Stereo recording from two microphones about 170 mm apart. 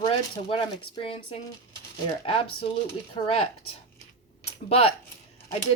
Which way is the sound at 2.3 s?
35° left (ahead or behind).